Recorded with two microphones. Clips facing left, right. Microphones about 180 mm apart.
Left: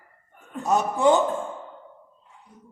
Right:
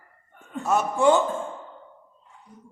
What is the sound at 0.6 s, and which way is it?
Speech, 20° left (ahead or behind).